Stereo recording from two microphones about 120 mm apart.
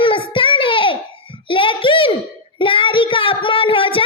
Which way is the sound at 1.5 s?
45° left (ahead or behind).